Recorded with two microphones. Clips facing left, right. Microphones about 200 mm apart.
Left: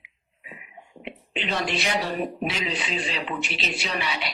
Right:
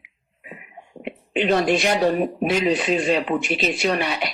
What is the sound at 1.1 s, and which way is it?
Speech, 50° right (ahead or behind).